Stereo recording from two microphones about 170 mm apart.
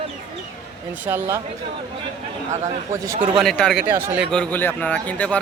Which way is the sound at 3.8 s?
15° right (ahead or behind).